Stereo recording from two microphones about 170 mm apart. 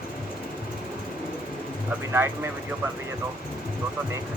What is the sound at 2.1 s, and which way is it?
Speech, 15° right (ahead or behind).